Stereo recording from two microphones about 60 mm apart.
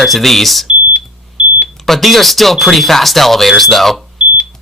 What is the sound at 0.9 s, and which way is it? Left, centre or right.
Beep, right.